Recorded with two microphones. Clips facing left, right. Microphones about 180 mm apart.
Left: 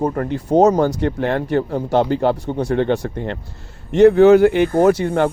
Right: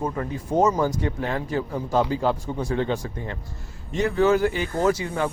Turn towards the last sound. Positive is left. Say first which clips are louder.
# left 8 dB
turn(degrees=65)  # may be behind; listen again after turning